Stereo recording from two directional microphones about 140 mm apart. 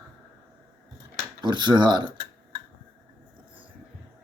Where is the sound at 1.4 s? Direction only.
30° right (ahead or behind).